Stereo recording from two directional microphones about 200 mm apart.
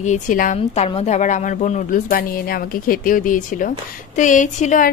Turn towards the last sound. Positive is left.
turn(degrees=40)  # may be behind; listen again after turning